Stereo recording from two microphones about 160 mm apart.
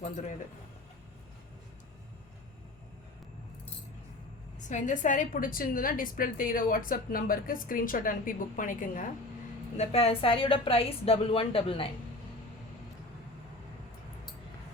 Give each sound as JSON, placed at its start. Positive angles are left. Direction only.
{"t": 0.0, "sound": "music", "side_deg": 50}
{"t": 4.7, "sound": "a woman's voice", "side_deg": 50}
{"t": 9.7, "sound": "a woman's voice", "side_deg": 40}